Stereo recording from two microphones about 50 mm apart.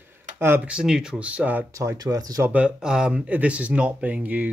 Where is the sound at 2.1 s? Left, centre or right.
Right.